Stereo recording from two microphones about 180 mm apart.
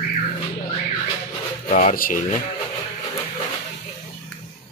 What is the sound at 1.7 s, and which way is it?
Speech, 40° left (ahead or behind).